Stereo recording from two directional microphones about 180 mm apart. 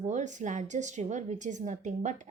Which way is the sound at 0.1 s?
40° right (ahead or behind).